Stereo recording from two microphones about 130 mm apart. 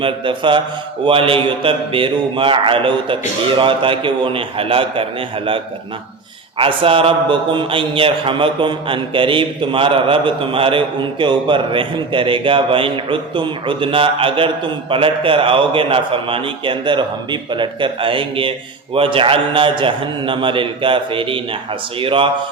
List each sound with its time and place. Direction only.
0.0 s a man's voice: 40° right (ahead or behind)
6.6 s a man's voice: 45° right (ahead or behind)